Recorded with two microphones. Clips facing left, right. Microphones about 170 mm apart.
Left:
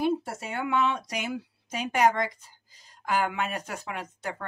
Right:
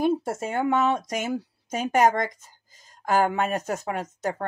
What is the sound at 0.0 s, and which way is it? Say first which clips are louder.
Speech: right 4 dB; 45° right (ahead or behind).